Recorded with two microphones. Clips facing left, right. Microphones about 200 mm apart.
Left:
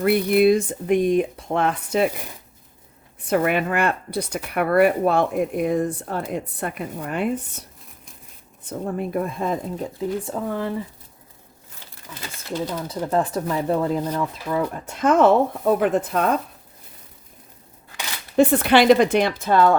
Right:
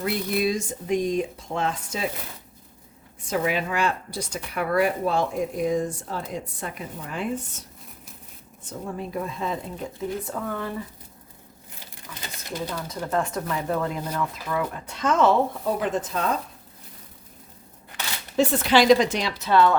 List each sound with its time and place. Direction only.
0.0 s speech: 60° left (ahead or behind)
3.2 s speech: 60° left (ahead or behind)
8.6 s speech: 55° left (ahead or behind)
10.2 s speech: 30° left (ahead or behind)
12.5 s speech: 30° left (ahead or behind)
14.8 s speech: 55° left (ahead or behind)
18.3 s speech: 55° left (ahead or behind)